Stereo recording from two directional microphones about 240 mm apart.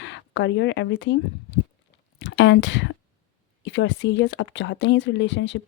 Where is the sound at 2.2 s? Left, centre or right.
Left.